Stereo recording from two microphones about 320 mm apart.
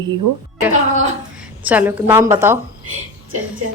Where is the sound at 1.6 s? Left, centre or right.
Centre.